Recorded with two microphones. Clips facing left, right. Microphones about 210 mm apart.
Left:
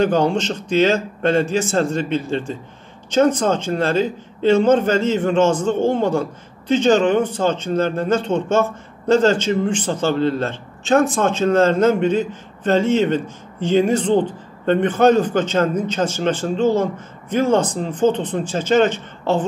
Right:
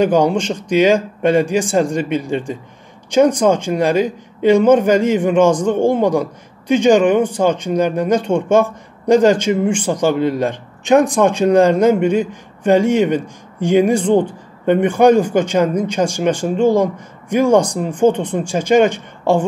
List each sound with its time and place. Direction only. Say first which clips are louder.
0.0 s speech: right 3 dB; 10° right (ahead or behind)